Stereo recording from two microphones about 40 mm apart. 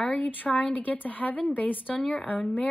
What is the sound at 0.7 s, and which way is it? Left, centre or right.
A woman's voice, left.